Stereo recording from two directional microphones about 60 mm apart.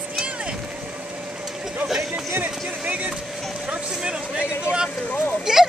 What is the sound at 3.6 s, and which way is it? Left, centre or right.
Vehicle, centre.